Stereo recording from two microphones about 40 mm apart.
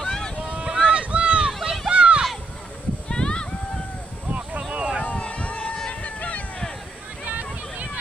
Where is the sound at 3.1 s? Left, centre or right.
Left.